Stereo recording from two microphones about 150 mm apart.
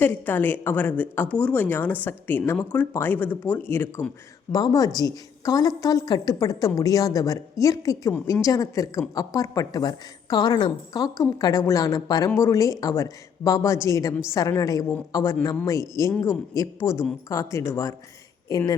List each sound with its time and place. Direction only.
0.0 s a woman's voice: 15° left (ahead or behind)